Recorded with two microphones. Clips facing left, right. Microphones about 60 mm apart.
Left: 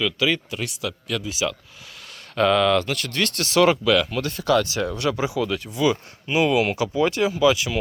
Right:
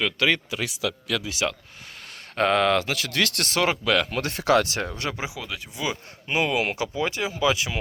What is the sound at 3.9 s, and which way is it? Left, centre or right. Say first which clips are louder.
Speech: left 3 dB; right.